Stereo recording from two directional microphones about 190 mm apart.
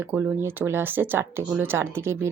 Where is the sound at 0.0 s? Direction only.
10° right (ahead or behind).